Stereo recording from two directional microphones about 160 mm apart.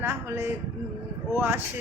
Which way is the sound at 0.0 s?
15° right (ahead or behind).